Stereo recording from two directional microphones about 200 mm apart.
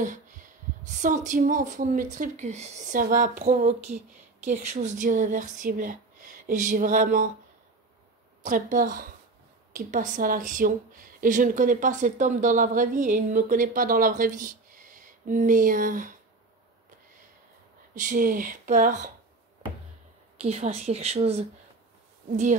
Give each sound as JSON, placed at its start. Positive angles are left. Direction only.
{"t": 0.0, "sound": "a sound", "side_deg": -40}
{"t": 0.8, "sound": "a woman's voice", "side_deg": -40}
{"t": 8.4, "sound": "a woman's voice", "side_deg": -40}
{"t": 17.9, "sound": "a woman's voice", "side_deg": -40}
{"t": 20.4, "sound": "a woman's voice", "side_deg": -30}